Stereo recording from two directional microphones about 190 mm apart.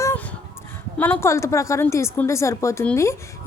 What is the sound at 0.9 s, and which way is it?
A woman's voice, 10° left (ahead or behind).